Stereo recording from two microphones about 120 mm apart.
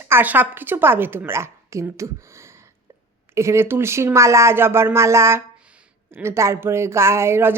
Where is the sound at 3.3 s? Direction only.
25° right (ahead or behind).